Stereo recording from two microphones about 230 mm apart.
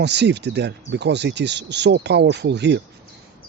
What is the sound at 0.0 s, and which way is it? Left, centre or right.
Speech, right.